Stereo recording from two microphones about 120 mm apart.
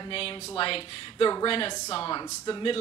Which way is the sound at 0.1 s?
50° left (ahead or behind).